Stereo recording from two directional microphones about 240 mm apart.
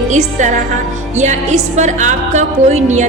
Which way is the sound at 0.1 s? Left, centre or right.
Right.